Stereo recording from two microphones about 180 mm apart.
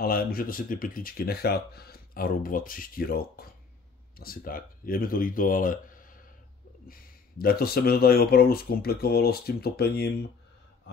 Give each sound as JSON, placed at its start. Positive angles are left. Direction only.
{"t": 0.0, "sound": "speech", "side_deg": 55}